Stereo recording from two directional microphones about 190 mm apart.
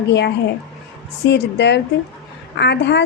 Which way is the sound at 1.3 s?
65° left (ahead or behind).